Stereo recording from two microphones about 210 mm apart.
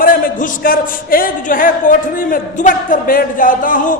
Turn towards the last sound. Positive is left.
turn(degrees=40)  # may be behind; listen again after turning